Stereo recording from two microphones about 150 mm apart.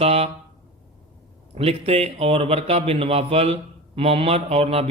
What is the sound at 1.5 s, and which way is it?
A man's voice, 40° right (ahead or behind).